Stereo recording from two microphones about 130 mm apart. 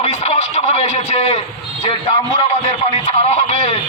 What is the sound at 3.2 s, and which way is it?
Speech, 55° left (ahead or behind).